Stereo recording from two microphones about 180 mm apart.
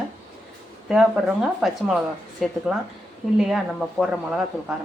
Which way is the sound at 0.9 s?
5° right (ahead or behind).